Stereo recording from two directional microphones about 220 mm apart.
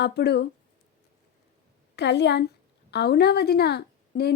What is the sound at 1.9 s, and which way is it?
A woman's voice, 50° left (ahead or behind).